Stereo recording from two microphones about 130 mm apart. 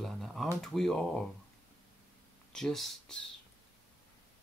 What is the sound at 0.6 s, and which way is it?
Music, 5° left (ahead or behind).